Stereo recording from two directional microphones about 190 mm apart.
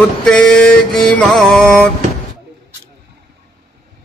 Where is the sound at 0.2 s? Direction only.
5° left (ahead or behind).